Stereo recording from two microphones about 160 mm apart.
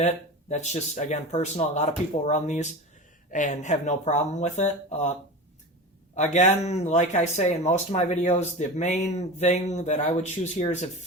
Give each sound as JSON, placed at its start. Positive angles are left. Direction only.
{"t": 0.0, "sound": "speech", "side_deg": 45}
{"t": 6.1, "sound": "speech", "side_deg": 45}